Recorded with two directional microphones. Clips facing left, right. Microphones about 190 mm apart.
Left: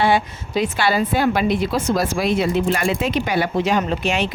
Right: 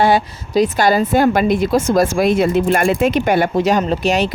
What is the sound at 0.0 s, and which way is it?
A woman's voice, 40° right (ahead or behind).